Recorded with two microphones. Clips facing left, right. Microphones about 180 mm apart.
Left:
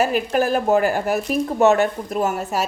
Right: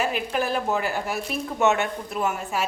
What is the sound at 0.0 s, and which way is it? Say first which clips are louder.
A woman's voice: left 6 dB; 45° left (ahead or behind).